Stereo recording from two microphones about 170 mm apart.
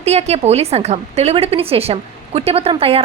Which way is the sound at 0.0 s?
40° right (ahead or behind).